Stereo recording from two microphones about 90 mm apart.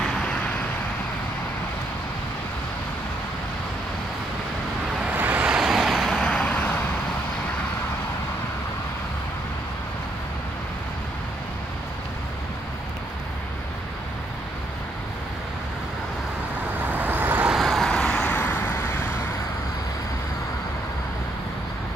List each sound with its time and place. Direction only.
0.0 s vehicle: 10° left (ahead or behind)
5.1 s vehicle: 20° right (ahead or behind)
5.6 s vehicle: 5° right (ahead or behind); by 6.8 s 15° left (ahead or behind)
16.9 s vehicle: 20° right (ahead or behind)
17.5 s vehicle: centre (ahead or behind)
18.3 s vehicle: 20° left (ahead or behind)